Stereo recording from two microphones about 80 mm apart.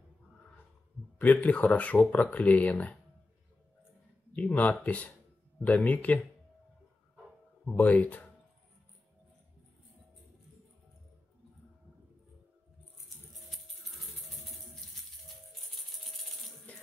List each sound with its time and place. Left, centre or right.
1.1 s speech: left
4.4 s speech: centre
7.6 s speech: left